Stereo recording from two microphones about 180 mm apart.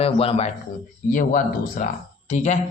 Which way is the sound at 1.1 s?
45° left (ahead or behind).